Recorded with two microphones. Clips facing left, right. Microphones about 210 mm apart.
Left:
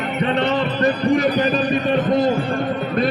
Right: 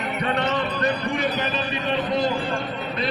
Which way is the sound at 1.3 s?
45° left (ahead or behind).